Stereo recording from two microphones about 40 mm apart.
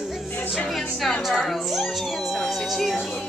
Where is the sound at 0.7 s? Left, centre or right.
Centre.